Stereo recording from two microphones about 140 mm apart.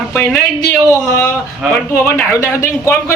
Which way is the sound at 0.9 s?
20° left (ahead or behind).